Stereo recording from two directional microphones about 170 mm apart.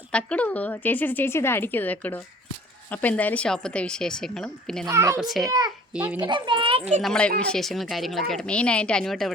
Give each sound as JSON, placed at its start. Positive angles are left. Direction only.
{"t": 0.1, "sound": "a woman's voice", "side_deg": 5}
{"t": 4.9, "sound": "a child's voice", "side_deg": -15}
{"t": 5.2, "sound": "speech", "side_deg": 0}
{"t": 5.5, "sound": "a child's voice", "side_deg": -20}
{"t": 7.0, "sound": "speech", "side_deg": 5}